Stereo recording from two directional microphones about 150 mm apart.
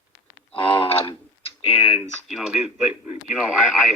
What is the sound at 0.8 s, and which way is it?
Typing, 40° left (ahead or behind).